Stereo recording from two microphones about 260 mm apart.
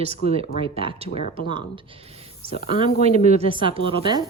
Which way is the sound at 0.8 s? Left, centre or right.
Right.